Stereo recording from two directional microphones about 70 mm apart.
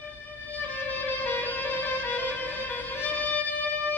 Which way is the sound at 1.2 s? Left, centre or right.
Left.